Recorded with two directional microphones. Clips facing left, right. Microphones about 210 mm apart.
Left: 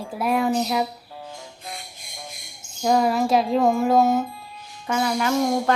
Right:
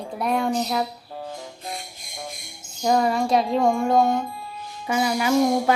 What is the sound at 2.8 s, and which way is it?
Speech, centre (ahead or behind).